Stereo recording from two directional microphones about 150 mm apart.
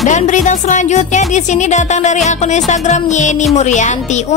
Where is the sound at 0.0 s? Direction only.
55° left (ahead or behind).